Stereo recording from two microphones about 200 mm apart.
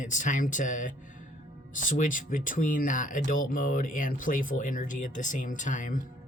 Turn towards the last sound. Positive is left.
turn(degrees=40)  # may be behind; listen again after turning